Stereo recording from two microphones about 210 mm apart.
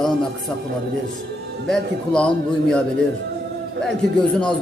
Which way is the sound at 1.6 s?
Centre (ahead or behind).